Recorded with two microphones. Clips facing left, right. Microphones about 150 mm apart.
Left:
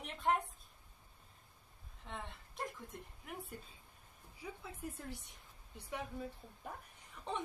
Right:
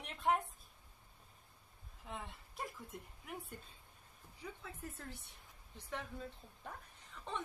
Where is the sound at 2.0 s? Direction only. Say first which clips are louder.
Even; 5° right (ahead or behind).